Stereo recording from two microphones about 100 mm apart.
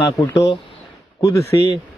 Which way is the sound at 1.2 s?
30° left (ahead or behind).